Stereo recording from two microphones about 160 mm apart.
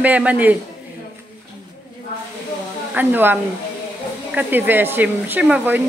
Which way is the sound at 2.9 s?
10° right (ahead or behind).